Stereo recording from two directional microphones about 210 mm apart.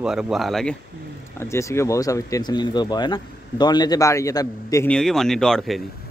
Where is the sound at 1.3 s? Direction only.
15° left (ahead or behind).